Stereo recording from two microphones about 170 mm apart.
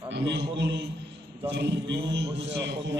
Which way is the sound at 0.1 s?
85° right.